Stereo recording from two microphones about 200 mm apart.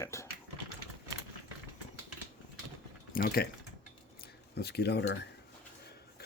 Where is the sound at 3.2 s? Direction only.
50° left (ahead or behind).